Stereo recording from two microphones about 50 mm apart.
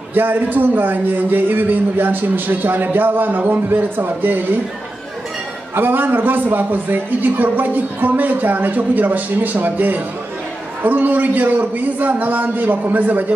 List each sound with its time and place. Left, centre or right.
0.1 s a man's voice: right
5.8 s a man's voice: right